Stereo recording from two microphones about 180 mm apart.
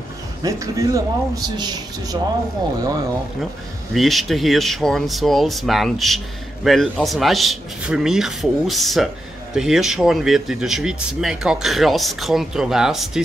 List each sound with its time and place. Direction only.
0.4 s a man's voice: 20° right (ahead or behind)
3.9 s speech: centre (ahead or behind)